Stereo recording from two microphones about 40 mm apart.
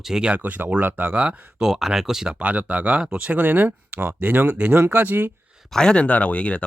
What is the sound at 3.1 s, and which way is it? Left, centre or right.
Speech, right.